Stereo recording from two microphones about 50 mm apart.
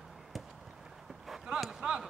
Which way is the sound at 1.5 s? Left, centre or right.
Centre.